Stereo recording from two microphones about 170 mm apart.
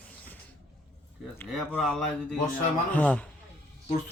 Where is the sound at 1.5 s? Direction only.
Centre (ahead or behind).